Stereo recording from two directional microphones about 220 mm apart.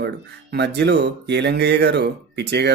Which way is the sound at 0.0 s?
50° right (ahead or behind).